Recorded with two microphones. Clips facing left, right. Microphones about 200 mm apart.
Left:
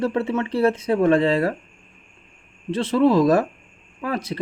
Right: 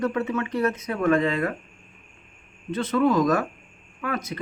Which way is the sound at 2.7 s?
30° left (ahead or behind).